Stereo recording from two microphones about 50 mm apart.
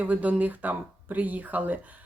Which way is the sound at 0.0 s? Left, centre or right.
Right.